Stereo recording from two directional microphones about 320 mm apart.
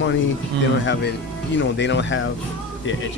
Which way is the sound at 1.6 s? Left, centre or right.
Left.